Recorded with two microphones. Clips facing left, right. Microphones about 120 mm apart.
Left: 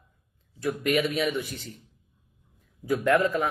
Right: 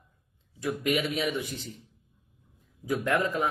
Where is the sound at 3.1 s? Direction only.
20° right (ahead or behind).